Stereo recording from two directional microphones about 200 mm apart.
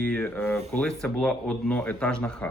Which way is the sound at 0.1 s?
10° left (ahead or behind).